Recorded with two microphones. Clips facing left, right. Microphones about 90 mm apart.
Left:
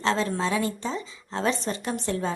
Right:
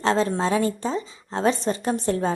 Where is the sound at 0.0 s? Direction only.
35° right (ahead or behind).